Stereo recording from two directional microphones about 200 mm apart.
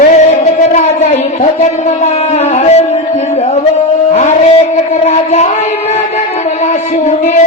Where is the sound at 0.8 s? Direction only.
35° left (ahead or behind).